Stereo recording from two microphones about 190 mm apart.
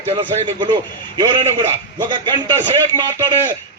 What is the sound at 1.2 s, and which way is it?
A man's voice, 20° right (ahead or behind).